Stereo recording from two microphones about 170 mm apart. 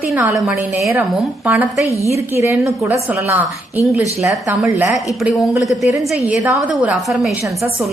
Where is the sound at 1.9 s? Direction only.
20° left (ahead or behind).